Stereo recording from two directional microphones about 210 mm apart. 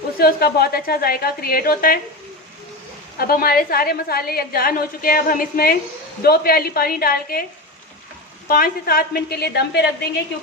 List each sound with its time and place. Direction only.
0.2 s a woman's voice: 45° left (ahead or behind)
3.2 s a woman's voice: 45° left (ahead or behind)
8.4 s a woman's voice: 45° left (ahead or behind)